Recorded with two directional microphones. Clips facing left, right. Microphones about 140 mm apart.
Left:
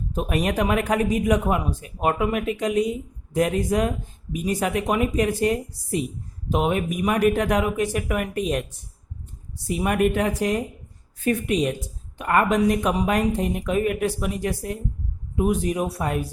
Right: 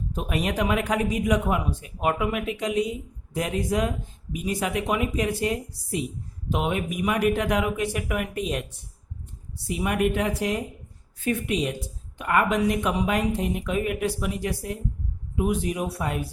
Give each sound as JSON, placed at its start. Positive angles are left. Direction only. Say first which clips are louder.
{"t": 0.1, "sound": "a man's voice", "louder": "left 4 dB", "side_deg": 45}
{"t": 9.6, "sound": "a man's voice", "louder": "left 3 dB", "side_deg": 45}